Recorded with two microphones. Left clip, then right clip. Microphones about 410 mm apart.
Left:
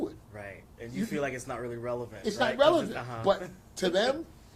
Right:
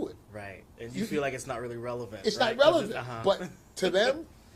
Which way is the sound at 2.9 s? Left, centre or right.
Right.